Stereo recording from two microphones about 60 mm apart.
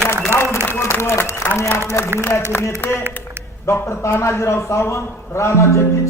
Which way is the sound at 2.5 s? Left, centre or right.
Left.